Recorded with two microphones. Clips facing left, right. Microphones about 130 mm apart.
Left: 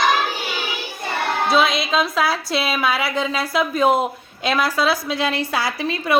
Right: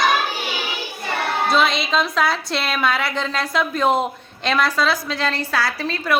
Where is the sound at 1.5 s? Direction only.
Centre (ahead or behind).